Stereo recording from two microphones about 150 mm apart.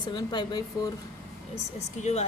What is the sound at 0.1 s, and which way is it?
Speech, 30° left (ahead or behind).